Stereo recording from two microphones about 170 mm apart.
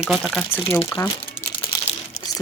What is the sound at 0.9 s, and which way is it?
Speech, 15° left (ahead or behind).